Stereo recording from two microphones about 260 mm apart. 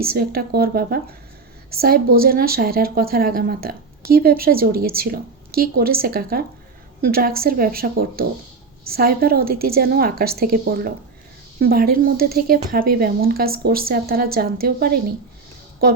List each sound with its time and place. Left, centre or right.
0.0 s a woman's voice: right